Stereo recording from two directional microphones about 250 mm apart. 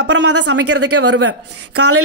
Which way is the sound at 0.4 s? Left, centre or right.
Right.